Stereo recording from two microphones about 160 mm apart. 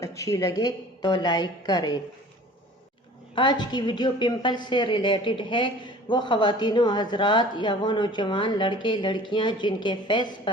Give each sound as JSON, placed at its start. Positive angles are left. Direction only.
{"t": 0.0, "sound": "a woman's voice", "side_deg": 20}
{"t": 3.3, "sound": "a woman's voice", "side_deg": 30}